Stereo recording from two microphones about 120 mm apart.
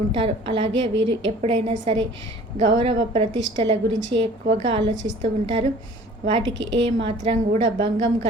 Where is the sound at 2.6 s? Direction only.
50° right (ahead or behind).